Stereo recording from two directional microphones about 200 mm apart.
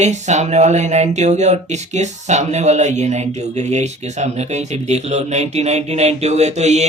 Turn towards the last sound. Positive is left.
turn(degrees=-35)  # may be behind; listen again after turning